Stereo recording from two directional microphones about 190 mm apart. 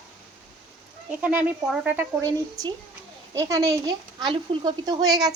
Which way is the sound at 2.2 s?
20° right (ahead or behind).